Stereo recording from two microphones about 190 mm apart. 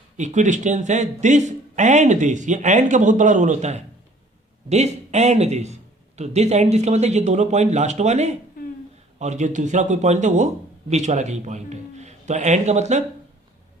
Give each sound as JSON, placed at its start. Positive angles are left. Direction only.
{"t": 0.2, "sound": "a man's voice", "side_deg": -40}